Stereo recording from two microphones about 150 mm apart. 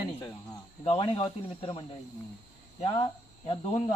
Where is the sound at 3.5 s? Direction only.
50° left (ahead or behind).